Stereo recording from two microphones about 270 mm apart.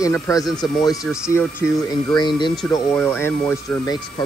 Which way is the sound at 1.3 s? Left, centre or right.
Centre.